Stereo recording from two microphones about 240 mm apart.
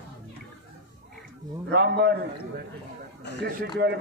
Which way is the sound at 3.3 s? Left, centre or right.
Left.